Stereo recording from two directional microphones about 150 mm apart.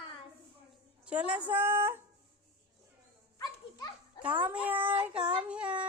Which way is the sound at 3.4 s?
25° left (ahead or behind).